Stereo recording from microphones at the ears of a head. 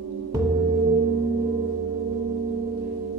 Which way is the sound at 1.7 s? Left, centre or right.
Right.